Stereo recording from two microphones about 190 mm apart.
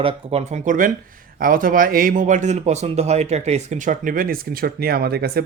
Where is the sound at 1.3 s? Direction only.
45° right (ahead or behind).